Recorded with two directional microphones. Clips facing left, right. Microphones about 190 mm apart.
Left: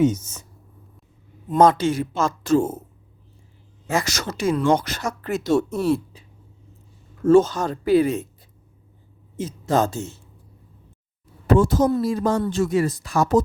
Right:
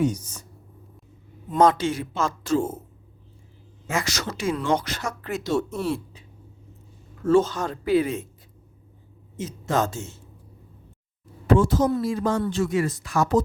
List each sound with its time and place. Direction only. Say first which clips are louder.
0.0 s speech: left 5 dB; 25° left (ahead or behind)
1.5 s speech: left 3 dB; 40° left (ahead or behind)
3.8 s speech: left 3 dB; 40° left (ahead or behind)
7.3 s speech: left 4 dB; 45° left (ahead or behind)
9.4 s speech: left 4 dB; 35° left (ahead or behind)
11.4 s speech: left 2 dB; 40° left (ahead or behind)